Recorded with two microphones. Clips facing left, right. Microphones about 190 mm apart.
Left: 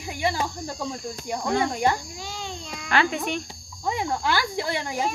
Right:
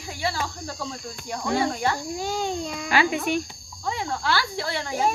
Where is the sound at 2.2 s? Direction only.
45° right (ahead or behind).